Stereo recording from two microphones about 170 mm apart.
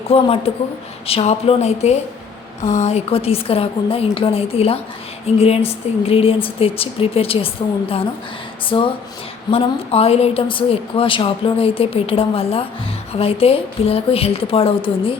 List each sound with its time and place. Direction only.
0.1 s a woman's voice: 35° left (ahead or behind)